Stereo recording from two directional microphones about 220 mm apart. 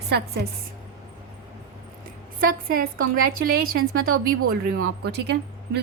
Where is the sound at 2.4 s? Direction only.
40° right (ahead or behind).